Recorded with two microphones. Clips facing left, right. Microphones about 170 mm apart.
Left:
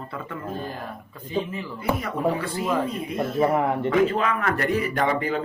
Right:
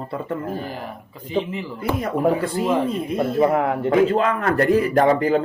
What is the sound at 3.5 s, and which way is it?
Speech, 5° right (ahead or behind).